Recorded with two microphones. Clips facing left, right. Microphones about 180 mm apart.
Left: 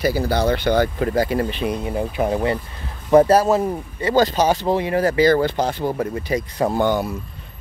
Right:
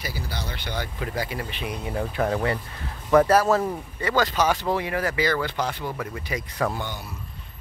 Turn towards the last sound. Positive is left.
turn(degrees=55)  # may be behind; listen again after turning